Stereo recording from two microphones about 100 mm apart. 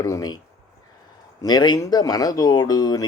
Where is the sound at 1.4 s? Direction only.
45° left (ahead or behind).